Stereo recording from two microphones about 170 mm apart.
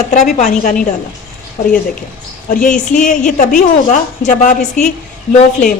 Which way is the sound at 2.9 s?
50° left (ahead or behind).